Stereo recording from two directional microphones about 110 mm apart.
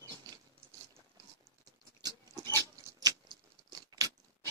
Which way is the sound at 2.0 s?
35° right (ahead or behind).